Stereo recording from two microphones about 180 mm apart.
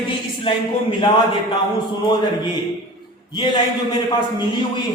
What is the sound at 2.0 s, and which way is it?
Speech, 25° left (ahead or behind).